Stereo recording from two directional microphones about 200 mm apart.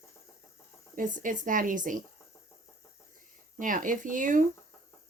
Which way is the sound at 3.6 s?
40° right (ahead or behind).